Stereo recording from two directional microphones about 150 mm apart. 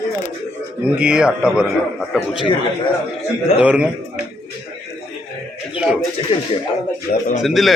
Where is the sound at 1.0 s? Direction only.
5° right (ahead or behind).